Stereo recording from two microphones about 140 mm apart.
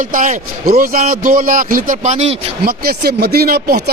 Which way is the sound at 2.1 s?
50° right (ahead or behind).